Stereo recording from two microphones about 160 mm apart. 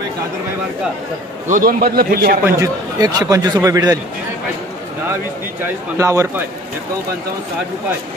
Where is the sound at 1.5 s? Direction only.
65° right (ahead or behind).